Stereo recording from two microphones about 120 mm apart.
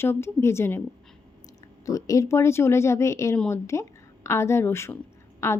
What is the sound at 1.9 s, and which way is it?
Speech, 30° left (ahead or behind).